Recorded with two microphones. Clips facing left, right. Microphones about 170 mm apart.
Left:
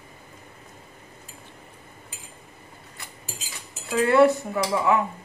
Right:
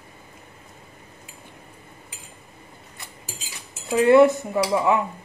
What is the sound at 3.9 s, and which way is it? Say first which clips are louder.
Speech: right 3 dB; 20° right (ahead or behind).